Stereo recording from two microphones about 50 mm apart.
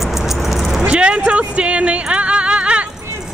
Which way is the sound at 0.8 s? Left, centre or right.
Right.